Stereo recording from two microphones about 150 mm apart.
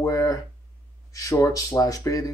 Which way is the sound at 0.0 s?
20° left (ahead or behind).